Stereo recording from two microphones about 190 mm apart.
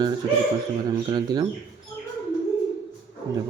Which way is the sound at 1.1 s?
20° right (ahead or behind).